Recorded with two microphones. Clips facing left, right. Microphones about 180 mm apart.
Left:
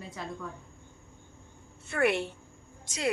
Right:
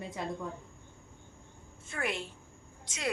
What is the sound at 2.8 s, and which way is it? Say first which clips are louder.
Speech: left 5 dB; 35° left (ahead or behind).